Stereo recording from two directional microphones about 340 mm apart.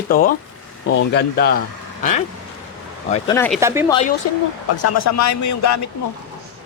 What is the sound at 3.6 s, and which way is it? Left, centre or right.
Speech, centre.